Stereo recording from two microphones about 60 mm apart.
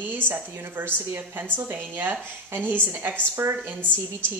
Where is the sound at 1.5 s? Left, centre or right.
Right.